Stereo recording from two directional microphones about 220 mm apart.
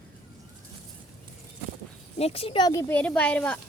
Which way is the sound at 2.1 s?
25° left (ahead or behind).